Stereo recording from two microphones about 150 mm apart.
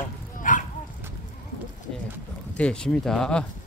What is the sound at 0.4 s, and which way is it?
Bow-wow, 60° left (ahead or behind).